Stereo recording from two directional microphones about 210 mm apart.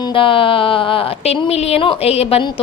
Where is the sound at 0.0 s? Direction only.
25° left (ahead or behind).